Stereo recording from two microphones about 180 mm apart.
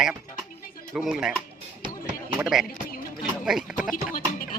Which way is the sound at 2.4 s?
5° right (ahead or behind).